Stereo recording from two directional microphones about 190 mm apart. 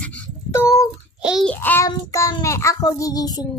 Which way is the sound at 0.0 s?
10° left (ahead or behind).